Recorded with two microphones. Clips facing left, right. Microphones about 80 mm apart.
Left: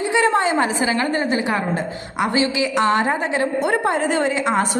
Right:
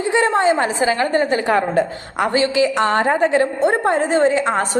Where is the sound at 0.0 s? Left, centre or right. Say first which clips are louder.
Right 1 dB; right.